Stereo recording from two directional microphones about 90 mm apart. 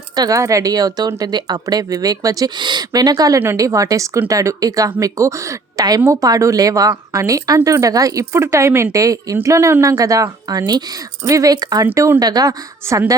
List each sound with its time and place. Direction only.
0.2 s speech: 35° right (ahead or behind)
11.9 s speech: 30° right (ahead or behind)
12.2 s speech: 45° right (ahead or behind)